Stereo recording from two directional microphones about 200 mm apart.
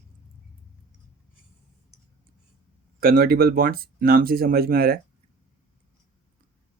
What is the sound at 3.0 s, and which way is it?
Speech, 50° right (ahead or behind).